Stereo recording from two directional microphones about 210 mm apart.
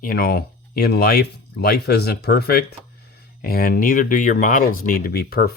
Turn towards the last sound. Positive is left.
turn(degrees=45)  # may be behind; listen again after turning